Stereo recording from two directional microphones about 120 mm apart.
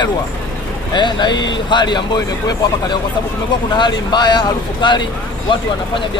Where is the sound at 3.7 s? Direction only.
40° left (ahead or behind).